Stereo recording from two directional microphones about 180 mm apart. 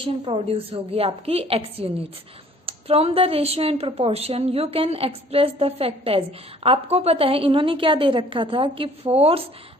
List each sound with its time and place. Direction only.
0.0 s a woman's voice: 30° right (ahead or behind)